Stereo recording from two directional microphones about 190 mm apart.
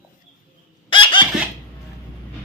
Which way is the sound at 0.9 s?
25° left (ahead or behind).